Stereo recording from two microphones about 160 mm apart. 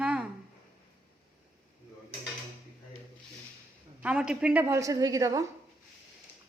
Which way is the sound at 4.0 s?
5° right (ahead or behind).